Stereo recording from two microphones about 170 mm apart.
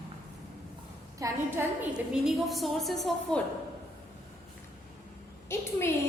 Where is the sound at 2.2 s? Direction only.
Centre (ahead or behind).